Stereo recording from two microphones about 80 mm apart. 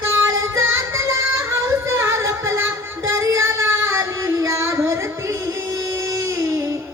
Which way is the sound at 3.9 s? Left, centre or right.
Right.